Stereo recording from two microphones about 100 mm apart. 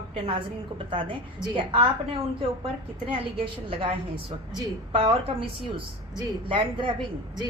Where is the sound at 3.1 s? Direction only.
60° right (ahead or behind).